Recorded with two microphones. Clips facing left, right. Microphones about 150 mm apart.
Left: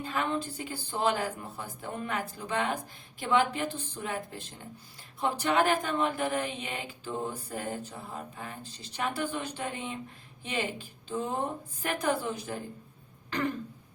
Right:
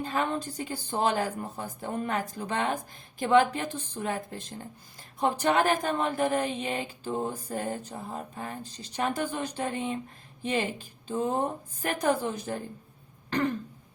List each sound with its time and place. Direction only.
0.1 s a woman's voice: 40° right (ahead or behind)